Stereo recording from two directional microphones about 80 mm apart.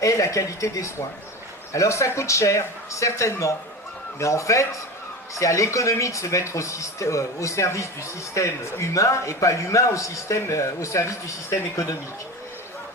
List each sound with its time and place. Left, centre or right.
0.0 s a man's voice: left